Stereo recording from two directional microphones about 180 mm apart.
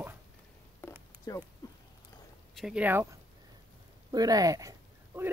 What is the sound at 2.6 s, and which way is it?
Speech, 5° right (ahead or behind).